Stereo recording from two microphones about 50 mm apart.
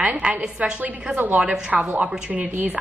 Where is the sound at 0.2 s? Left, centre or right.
Centre.